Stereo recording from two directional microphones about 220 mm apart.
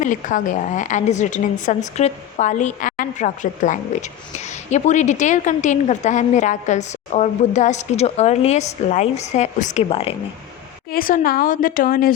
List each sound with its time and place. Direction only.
0.0 s a woman's voice: 35° left (ahead or behind)
10.9 s a woman's voice: 40° left (ahead or behind)